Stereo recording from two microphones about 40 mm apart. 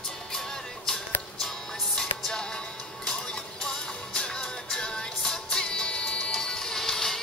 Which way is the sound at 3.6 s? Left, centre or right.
Centre.